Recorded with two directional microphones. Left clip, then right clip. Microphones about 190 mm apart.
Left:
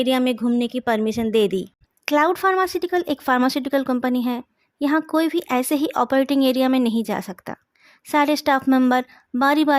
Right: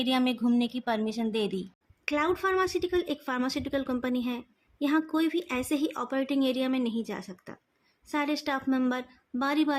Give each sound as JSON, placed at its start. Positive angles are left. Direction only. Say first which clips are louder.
{"t": 0.0, "sound": "a woman's voice", "louder": "left 8 dB", "side_deg": 30}
{"t": 2.0, "sound": "speech", "louder": "left 10 dB", "side_deg": 50}